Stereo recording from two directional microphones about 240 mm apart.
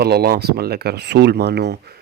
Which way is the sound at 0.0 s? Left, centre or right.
Right.